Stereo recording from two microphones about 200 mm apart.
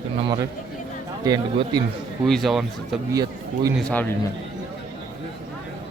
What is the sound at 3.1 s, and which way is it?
Speech, 20° right (ahead or behind).